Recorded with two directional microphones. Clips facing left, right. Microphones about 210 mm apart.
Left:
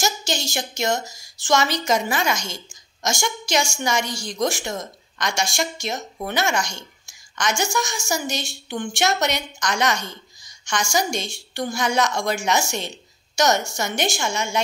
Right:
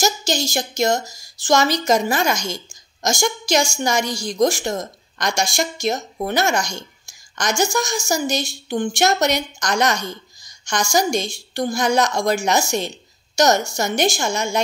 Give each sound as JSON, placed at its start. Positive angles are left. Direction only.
{"t": 0.0, "sound": "speech", "side_deg": -40}